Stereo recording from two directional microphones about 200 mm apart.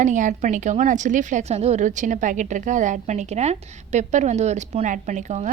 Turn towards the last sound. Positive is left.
turn(degrees=-35)  # may be behind; listen again after turning